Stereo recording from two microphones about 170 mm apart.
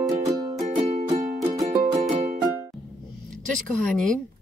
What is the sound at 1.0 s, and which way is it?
Music, 40° right (ahead or behind).